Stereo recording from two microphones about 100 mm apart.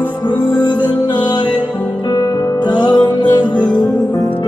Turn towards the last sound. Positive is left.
turn(degrees=45)  # may be behind; listen again after turning